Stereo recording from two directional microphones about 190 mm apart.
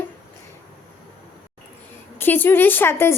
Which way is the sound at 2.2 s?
10° left (ahead or behind).